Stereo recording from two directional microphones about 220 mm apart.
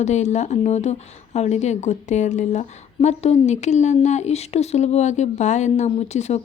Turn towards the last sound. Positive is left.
turn(degrees=30)  # may be behind; listen again after turning